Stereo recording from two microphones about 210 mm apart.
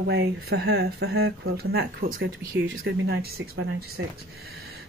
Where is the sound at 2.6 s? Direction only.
65° right (ahead or behind).